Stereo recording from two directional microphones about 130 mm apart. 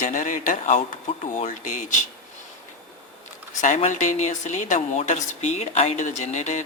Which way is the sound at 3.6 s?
70° left (ahead or behind).